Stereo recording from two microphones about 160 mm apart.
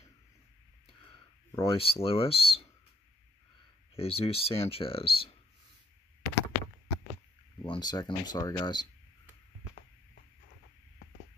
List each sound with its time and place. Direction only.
0.8 s a sound: 30° left (ahead or behind)
2.0 s speech: 35° left (ahead or behind)
3.9 s speech: 35° left (ahead or behind)
7.5 s speech: 30° left (ahead or behind)